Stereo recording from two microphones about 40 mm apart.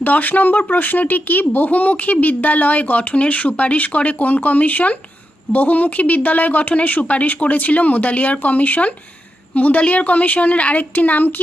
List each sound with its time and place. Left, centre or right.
0.0 s speech: left